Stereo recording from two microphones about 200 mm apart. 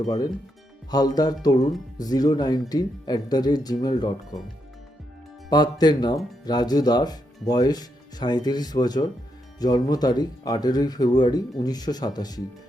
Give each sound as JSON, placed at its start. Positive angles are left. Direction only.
{"t": 0.9, "sound": "speech", "side_deg": 20}
{"t": 5.5, "sound": "speech", "side_deg": 20}